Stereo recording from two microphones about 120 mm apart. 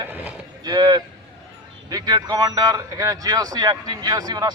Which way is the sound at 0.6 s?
35° right (ahead or behind).